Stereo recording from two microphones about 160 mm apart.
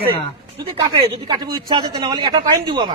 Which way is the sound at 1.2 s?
25° right (ahead or behind).